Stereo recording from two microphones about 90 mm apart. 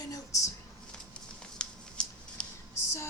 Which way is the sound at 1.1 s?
10° left (ahead or behind).